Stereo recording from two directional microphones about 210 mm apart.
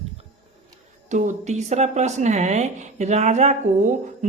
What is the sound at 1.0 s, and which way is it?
Speech, 35° right (ahead or behind).